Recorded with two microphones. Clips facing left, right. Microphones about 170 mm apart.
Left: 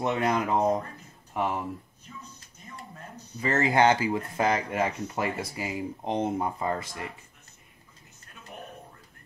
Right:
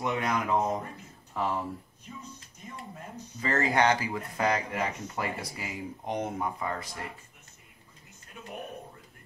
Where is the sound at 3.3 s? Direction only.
25° left (ahead or behind).